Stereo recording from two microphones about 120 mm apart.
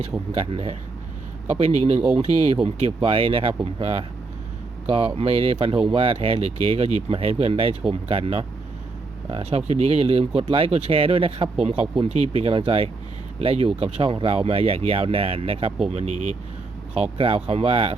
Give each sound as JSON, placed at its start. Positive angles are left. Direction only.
{"t": 0.3, "sound": "speech", "side_deg": -55}
{"t": 15.9, "sound": "speech", "side_deg": -65}
{"t": 16.9, "sound": "speech", "side_deg": -55}